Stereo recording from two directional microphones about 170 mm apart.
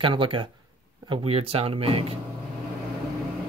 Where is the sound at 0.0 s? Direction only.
30° right (ahead or behind).